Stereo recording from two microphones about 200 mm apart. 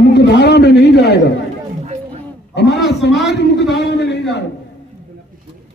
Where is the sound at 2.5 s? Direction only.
60° left (ahead or behind).